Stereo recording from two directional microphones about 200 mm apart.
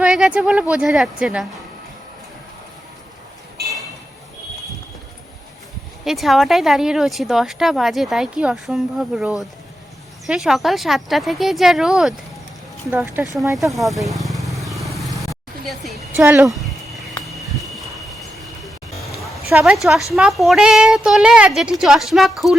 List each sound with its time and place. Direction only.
0.0 s speech: 5° right (ahead or behind)
6.1 s speech: centre (ahead or behind)
14.5 s vehicle: centre (ahead or behind)
16.1 s speech: 10° right (ahead or behind)
16.5 s a sound: centre (ahead or behind)
17.2 s music: centre (ahead or behind)
19.5 s speech: 10° right (ahead or behind)